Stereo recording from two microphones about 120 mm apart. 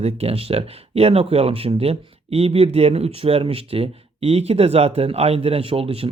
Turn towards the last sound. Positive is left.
turn(degrees=-50)  # may be behind; listen again after turning